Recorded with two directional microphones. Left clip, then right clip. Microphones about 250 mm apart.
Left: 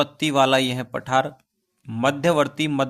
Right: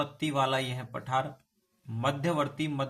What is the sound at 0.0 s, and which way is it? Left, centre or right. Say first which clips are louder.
Speech: left 10 dB; left.